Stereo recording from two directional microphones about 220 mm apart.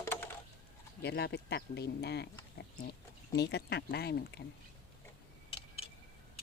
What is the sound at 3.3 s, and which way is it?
Speech, 50° left (ahead or behind).